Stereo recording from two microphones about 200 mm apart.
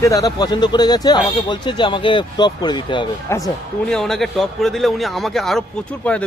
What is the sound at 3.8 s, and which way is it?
A man's voice, centre (ahead or behind).